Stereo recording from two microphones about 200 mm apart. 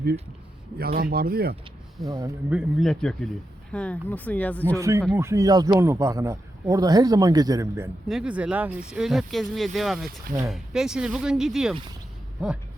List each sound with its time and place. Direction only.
0.8 s speech: 50° right (ahead or behind)
2.1 s a man's voice: 15° right (ahead or behind)
2.6 s speech: centre (ahead or behind)
4.8 s a man's voice: 15° right (ahead or behind)
8.0 s a man's voice: 5° right (ahead or behind)